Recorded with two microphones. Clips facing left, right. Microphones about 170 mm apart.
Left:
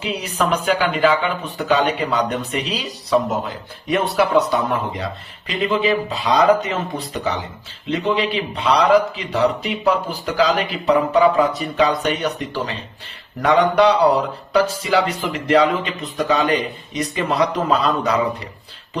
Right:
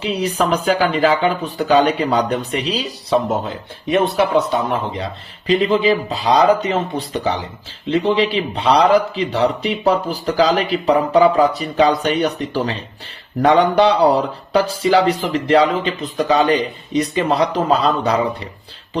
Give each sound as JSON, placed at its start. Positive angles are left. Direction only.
{"t": 0.0, "sound": "speech", "side_deg": -30}